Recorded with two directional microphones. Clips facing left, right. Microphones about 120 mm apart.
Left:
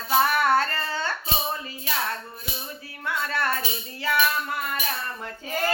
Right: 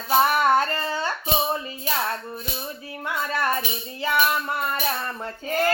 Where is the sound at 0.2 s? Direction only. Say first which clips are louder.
Right 2 dB; 20° right (ahead or behind).